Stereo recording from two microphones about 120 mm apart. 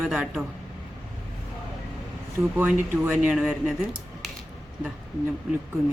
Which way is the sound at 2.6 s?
15° right (ahead or behind).